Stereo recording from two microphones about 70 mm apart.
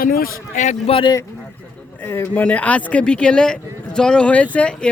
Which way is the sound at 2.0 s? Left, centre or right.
Left.